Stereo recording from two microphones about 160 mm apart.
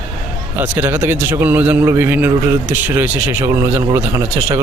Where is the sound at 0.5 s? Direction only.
10° right (ahead or behind).